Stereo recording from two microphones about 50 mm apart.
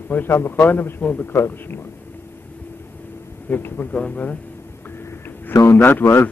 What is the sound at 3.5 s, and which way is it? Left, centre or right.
Speech, left.